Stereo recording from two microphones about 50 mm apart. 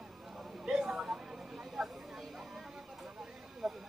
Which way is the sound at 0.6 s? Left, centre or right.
Centre.